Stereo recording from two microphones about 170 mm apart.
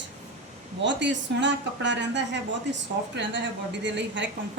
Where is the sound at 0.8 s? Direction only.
90° right.